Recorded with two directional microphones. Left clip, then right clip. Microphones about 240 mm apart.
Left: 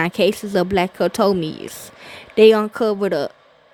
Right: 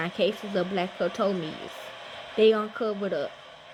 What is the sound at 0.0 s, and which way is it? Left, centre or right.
Speech, left.